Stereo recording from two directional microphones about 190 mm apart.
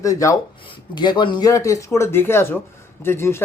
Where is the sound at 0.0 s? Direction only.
15° left (ahead or behind).